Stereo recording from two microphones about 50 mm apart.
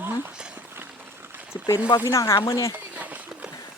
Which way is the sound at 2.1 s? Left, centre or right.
Left.